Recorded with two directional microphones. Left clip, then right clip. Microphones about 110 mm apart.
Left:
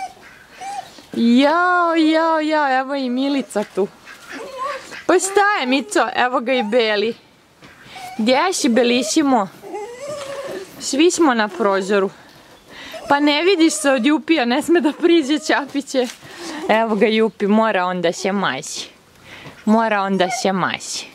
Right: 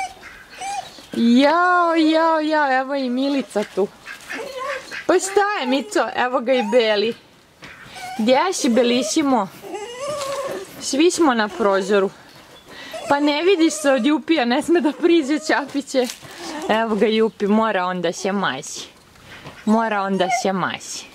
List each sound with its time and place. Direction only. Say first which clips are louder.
0.6 s speech: right 1 dB; 5° right (ahead or behind)
4.3 s duck: left 1 dB; 5° right (ahead or behind)
5.0 s speech: left 3 dB; 15° left (ahead or behind)
8.3 s speech: left 1 dB; 15° left (ahead or behind)
9.7 s neigh: right 1 dB; 15° right (ahead or behind)
10.5 s speech: even; 10° left (ahead or behind)
13.1 s speech: left 2 dB; 15° left (ahead or behind)